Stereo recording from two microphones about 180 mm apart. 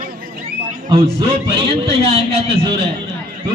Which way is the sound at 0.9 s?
30° right (ahead or behind).